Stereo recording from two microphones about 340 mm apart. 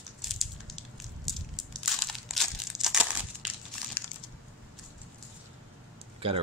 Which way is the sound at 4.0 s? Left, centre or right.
Centre.